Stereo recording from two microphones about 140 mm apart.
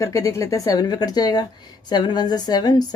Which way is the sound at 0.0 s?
20° left (ahead or behind).